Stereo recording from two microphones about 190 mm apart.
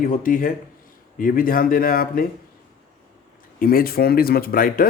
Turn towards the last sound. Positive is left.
turn(degrees=50)  # may be behind; listen again after turning